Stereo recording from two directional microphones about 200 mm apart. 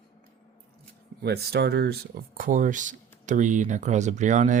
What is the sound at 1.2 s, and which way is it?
Speech, 55° right (ahead or behind).